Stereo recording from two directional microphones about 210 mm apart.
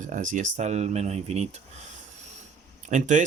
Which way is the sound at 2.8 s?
35° right (ahead or behind).